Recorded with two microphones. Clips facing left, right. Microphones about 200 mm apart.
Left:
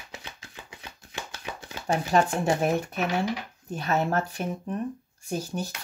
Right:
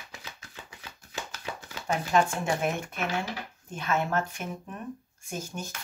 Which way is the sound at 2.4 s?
40° left (ahead or behind).